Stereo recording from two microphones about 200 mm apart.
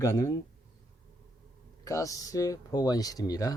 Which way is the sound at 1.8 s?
15° left (ahead or behind).